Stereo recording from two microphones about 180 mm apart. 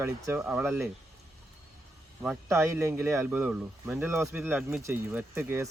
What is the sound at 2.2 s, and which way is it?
Speech, 15° right (ahead or behind).